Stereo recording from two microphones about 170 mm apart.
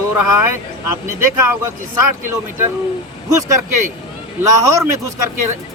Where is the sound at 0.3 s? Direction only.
15° right (ahead or behind).